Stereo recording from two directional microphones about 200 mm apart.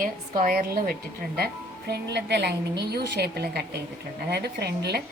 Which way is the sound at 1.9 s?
55° right (ahead or behind).